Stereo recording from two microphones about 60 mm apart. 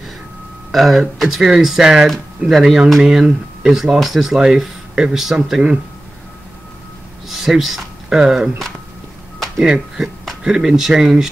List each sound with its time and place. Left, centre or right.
0.7 s speech: centre
7.2 s a sound: centre
8.2 s speech: centre